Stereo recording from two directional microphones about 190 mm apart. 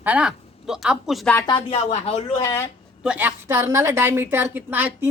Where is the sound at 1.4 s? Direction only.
25° left (ahead or behind).